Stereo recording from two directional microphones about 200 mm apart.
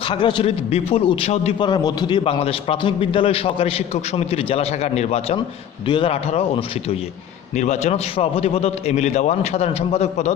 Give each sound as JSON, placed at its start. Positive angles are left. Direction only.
{"t": 0.1, "sound": "a man's voice", "side_deg": 25}